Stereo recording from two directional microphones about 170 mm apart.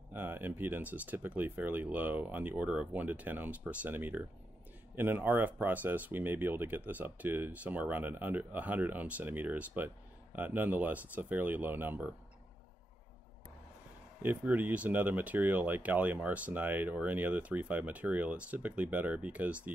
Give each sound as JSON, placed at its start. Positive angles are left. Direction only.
{"t": 0.1, "sound": "speech", "side_deg": -10}
{"t": 14.2, "sound": "speech", "side_deg": -10}